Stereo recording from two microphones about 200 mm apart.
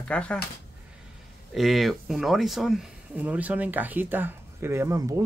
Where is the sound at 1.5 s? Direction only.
Centre (ahead or behind).